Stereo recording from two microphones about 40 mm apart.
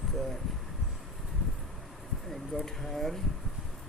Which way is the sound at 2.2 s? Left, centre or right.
Centre.